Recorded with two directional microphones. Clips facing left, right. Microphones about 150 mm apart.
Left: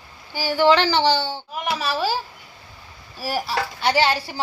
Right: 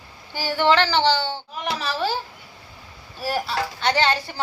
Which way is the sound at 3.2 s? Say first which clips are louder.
Even; 5° left (ahead or behind).